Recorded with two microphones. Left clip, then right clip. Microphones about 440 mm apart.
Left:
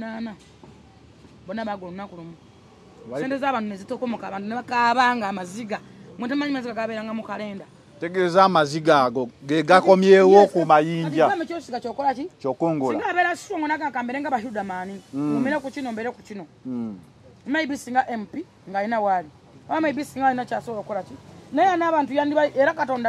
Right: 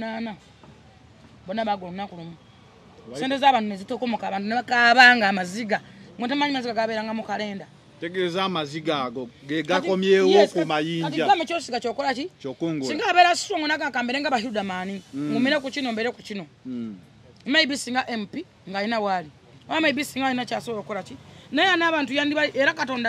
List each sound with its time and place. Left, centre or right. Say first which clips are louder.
0.0 s speech: right 2 dB; centre
1.5 s a man's voice: right 4 dB; centre
3.3 s a man's voice: right 6 dB; right
6.1 s a man's voice: right 2 dB; centre
8.2 s speech: left 9 dB; left
11.3 s a man's voice: right 3 dB; right
17.5 s speech: right 4 dB; right
19.7 s a man's voice: right 1 dB; right
20.2 s a man's voice: left 6 dB; centre
22.8 s speech: left 3 dB; right